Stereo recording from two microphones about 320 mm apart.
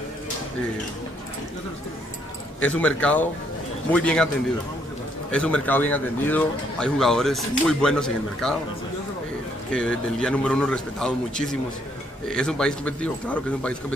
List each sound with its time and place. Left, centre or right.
2.6 s speech: centre
5.3 s speech: centre
9.7 s speech: centre